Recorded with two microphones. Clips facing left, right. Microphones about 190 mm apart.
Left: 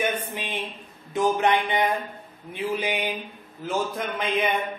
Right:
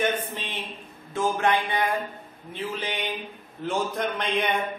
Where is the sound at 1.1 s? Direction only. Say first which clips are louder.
Left 2 dB; 20° left (ahead or behind).